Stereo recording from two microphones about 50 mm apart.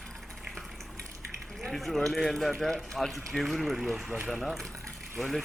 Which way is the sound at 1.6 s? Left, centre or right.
Centre.